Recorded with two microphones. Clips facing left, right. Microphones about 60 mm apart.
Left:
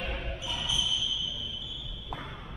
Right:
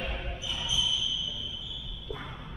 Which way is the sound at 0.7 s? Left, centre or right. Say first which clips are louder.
Right 1 dB; left.